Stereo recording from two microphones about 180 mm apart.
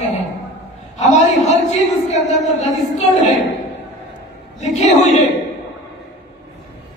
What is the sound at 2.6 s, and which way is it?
Speech, 40° left (ahead or behind).